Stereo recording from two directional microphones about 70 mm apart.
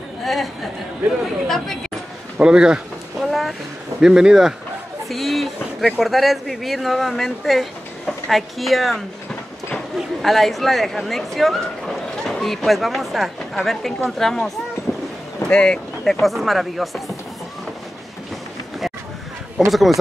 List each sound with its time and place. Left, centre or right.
0.2 s chatter: centre
2.3 s a sound: centre
3.3 s vehicle: centre
4.0 s speech: centre
14.9 s a sound: left
15.4 s speech: centre
19.7 s speech: centre